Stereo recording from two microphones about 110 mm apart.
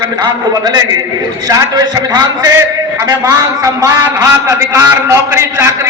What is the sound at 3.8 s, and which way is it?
A man's voice, 25° right (ahead or behind).